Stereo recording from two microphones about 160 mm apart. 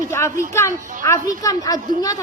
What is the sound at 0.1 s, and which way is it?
A woman's voice, 15° left (ahead or behind).